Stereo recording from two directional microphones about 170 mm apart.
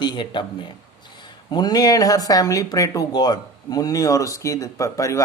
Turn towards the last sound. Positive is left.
turn(degrees=20)  # may be behind; listen again after turning